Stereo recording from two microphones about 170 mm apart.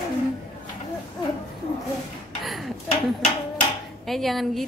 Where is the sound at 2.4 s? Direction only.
Centre (ahead or behind).